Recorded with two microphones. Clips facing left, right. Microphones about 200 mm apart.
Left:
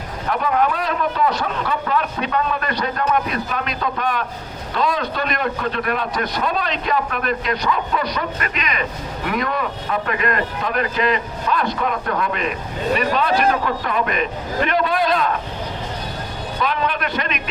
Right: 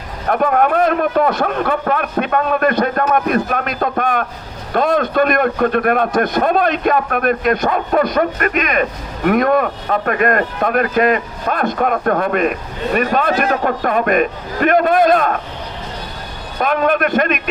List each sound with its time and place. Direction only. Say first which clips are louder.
0.3 s a man's voice: right 5 dB; 50° right (ahead or behind)
16.6 s a man's voice: right 7 dB; 50° right (ahead or behind)